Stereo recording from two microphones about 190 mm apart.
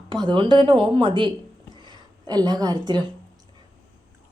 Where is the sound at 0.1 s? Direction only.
25° right (ahead or behind).